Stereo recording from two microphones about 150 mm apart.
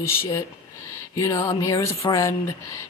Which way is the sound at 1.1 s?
25° left (ahead or behind).